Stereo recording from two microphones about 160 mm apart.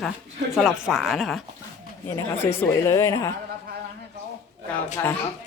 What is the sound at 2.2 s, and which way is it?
Speech, 15° left (ahead or behind).